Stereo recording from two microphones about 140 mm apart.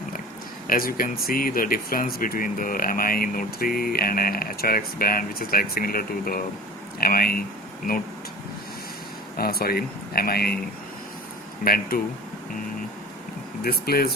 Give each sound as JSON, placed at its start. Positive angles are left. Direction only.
{"t": 0.7, "sound": "speech", "side_deg": 90}
{"t": 9.4, "sound": "speech", "side_deg": 90}
{"t": 11.6, "sound": "speech", "side_deg": 90}
{"t": 13.6, "sound": "speech", "side_deg": 90}